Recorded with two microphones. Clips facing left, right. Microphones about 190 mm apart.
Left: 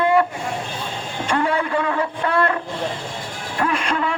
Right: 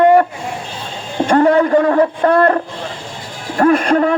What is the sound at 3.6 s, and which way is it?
Speech, 45° right (ahead or behind).